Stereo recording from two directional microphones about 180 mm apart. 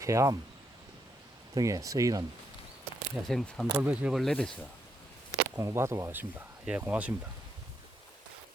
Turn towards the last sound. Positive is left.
turn(degrees=-10)  # may be behind; listen again after turning